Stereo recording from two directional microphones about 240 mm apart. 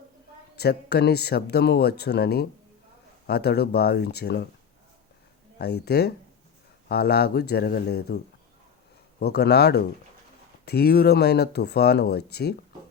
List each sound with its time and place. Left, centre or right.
0.5 s speech: left
5.5 s speech: left
9.2 s speech: left